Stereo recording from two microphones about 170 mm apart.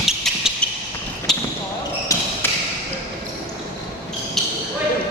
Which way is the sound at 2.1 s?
20° left (ahead or behind).